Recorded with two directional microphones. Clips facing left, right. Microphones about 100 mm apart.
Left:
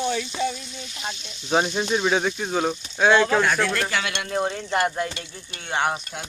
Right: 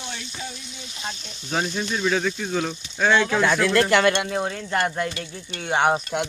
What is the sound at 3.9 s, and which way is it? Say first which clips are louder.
Speech: right 9 dB; 60° right (ahead or behind).